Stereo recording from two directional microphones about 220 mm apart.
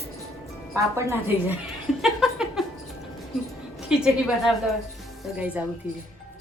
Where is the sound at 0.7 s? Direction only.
10° right (ahead or behind).